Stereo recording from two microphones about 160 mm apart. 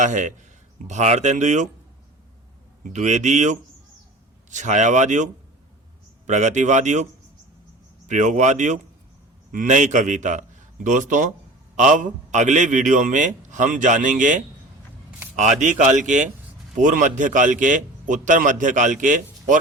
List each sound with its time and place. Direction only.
0.0 s a man's voice: 50° right (ahead or behind)
2.8 s a man's voice: 50° right (ahead or behind)
15.6 s a man's voice: 50° right (ahead or behind)